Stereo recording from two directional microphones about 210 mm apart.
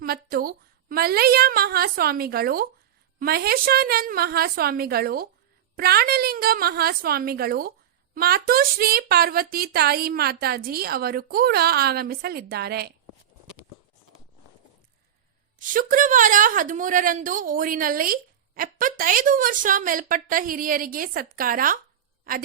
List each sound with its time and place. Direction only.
0.0 s speech: 45° right (ahead or behind)
15.5 s a woman's voice: 40° right (ahead or behind)